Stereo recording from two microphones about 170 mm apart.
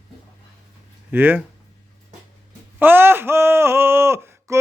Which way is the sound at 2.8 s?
10° right (ahead or behind).